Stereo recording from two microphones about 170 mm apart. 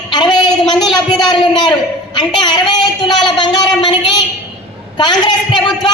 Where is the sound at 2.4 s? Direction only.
25° left (ahead or behind).